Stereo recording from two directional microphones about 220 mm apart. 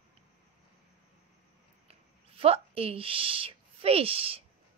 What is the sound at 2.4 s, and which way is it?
Speech, 25° right (ahead or behind).